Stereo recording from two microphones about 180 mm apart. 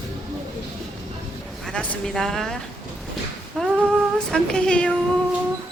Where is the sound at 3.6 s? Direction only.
5° left (ahead or behind).